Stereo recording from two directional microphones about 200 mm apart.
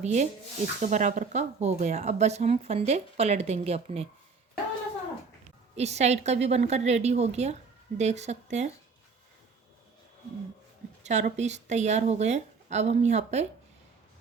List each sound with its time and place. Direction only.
0.0 s speech: 35° right (ahead or behind)
5.7 s speech: 35° right (ahead or behind)
11.0 s speech: 35° right (ahead or behind)